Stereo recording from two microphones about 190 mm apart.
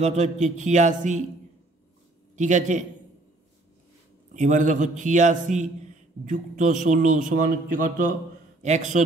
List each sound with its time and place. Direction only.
0.0 s a man's voice: 35° right (ahead or behind)
2.3 s a man's voice: 40° right (ahead or behind)
4.3 s a man's voice: 40° right (ahead or behind)